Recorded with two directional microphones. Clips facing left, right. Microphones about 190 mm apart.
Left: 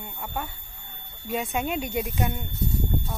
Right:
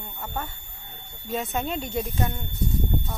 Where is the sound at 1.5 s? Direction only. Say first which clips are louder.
Left 2 dB; 10° left (ahead or behind).